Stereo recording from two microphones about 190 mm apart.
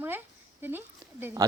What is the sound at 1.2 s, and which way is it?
Speech, 15° right (ahead or behind).